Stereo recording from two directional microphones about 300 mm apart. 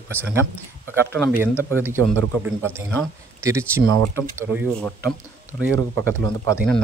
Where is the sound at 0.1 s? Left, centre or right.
Centre.